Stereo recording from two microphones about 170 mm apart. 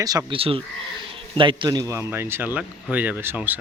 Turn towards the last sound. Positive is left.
turn(degrees=-10)  # may be behind; listen again after turning